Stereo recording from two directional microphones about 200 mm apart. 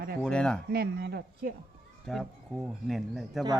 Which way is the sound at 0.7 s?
55° right (ahead or behind).